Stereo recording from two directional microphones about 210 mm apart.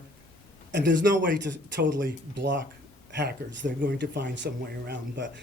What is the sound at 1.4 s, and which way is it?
Speech, 55° right (ahead or behind).